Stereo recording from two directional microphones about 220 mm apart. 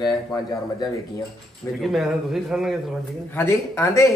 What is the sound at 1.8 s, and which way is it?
Speech, centre (ahead or behind).